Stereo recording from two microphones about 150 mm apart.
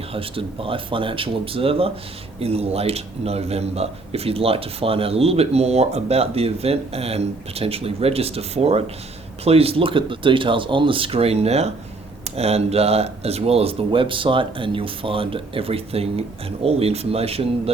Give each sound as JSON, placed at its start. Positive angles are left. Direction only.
{"t": 0.1, "sound": "speech", "side_deg": -35}